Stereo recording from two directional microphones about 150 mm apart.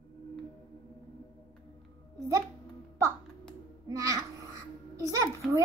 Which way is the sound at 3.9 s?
20° right (ahead or behind).